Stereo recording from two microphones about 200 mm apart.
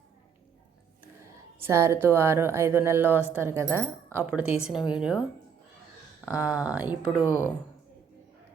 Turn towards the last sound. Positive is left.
turn(degrees=15)  # may be behind; listen again after turning